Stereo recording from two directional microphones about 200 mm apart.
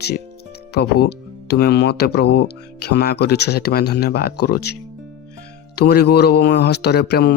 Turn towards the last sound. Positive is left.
turn(degrees=55)  # may be behind; listen again after turning